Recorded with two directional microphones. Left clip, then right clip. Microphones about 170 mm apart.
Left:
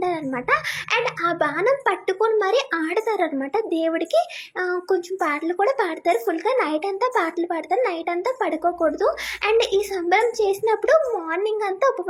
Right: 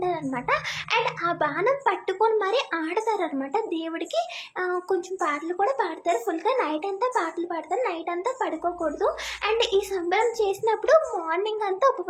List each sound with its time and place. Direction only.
0.0 s a child's voice: 25° left (ahead or behind)